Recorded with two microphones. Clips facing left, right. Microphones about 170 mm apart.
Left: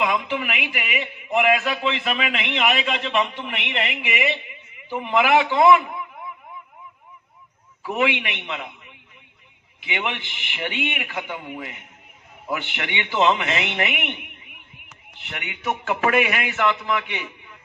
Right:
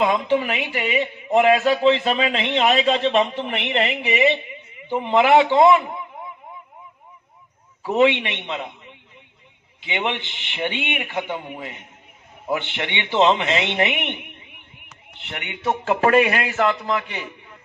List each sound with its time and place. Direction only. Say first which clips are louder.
0.0 s a man's voice: right 5 dB; 30° right (ahead or behind)
7.8 s a man's voice: right 6 dB; 25° right (ahead or behind)